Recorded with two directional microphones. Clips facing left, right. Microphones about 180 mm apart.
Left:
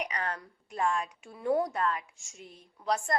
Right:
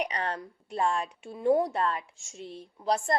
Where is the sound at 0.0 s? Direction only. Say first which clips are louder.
Right 3 dB; 30° right (ahead or behind).